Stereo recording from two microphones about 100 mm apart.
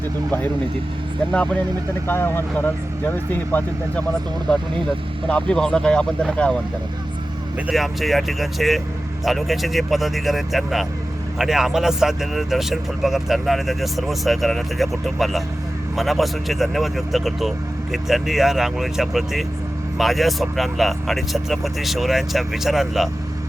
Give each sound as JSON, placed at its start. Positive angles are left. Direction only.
{"t": 2.0, "sound": "speech", "side_deg": 25}
{"t": 5.3, "sound": "speech", "side_deg": 10}
{"t": 7.7, "sound": "speech", "side_deg": 0}